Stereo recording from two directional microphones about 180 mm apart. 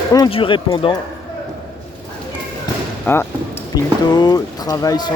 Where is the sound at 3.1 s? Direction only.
10° left (ahead or behind).